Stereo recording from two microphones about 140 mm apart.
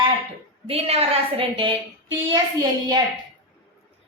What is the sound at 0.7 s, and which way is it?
A woman's voice, 45° right (ahead or behind).